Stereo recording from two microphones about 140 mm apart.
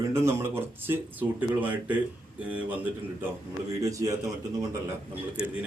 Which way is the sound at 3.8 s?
25° right (ahead or behind).